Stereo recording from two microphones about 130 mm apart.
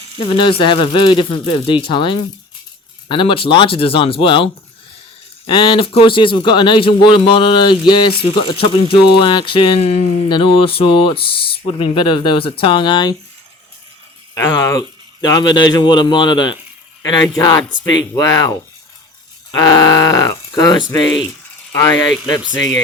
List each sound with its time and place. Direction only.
0.2 s speech: 40° left (ahead or behind)
5.5 s speech: 40° left (ahead or behind)
14.3 s speech: 25° left (ahead or behind)